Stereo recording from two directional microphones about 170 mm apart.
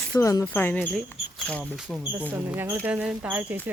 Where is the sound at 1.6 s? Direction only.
5° right (ahead or behind).